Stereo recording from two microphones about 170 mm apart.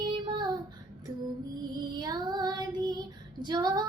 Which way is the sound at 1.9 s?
25° right (ahead or behind).